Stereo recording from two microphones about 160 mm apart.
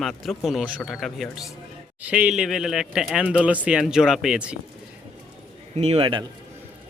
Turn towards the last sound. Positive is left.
turn(degrees=-30)  # may be behind; listen again after turning